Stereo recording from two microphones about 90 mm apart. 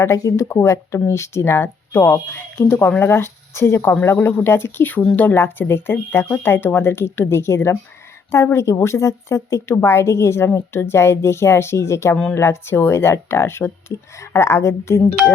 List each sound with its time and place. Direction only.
0.0 s a woman's voice: 35° left (ahead or behind)